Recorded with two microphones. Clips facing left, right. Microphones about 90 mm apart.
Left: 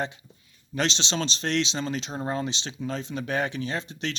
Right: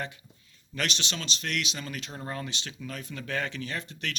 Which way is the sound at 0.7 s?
25° left (ahead or behind).